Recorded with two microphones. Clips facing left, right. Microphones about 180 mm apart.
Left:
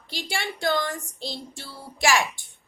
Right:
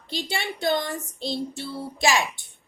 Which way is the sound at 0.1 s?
20° right (ahead or behind).